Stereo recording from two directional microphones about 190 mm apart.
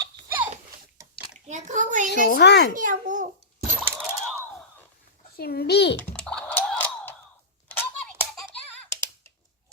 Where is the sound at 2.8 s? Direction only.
45° right (ahead or behind).